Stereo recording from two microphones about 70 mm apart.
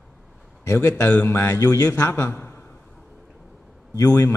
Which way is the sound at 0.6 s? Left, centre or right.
Left.